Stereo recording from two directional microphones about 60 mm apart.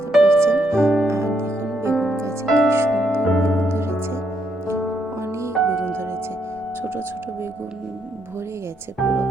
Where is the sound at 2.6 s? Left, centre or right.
Right.